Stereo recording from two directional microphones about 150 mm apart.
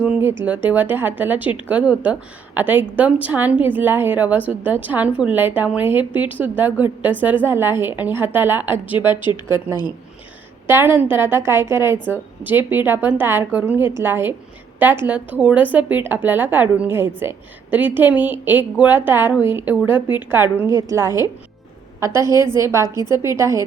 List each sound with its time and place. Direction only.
0.0 s speech: 10° right (ahead or behind)
10.7 s a woman's voice: 15° right (ahead or behind)